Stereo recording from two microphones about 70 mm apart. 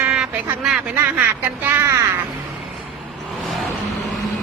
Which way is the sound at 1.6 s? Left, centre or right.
Right.